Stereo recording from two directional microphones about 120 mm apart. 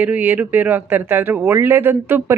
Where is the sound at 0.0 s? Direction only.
15° right (ahead or behind).